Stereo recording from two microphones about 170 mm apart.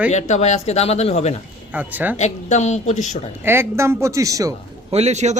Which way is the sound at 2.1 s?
45° left (ahead or behind).